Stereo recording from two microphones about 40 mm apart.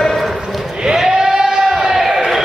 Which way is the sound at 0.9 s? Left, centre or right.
Centre.